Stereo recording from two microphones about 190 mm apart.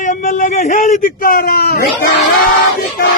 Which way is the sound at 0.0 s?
45° left (ahead or behind).